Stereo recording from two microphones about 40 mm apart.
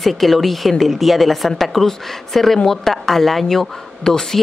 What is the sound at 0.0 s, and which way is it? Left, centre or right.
A woman's voice, centre.